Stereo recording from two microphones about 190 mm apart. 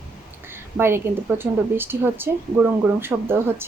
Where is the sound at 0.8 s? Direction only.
10° right (ahead or behind).